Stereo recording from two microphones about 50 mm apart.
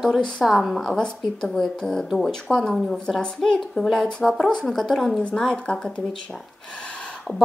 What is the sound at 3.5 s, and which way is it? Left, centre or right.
A woman's voice, centre.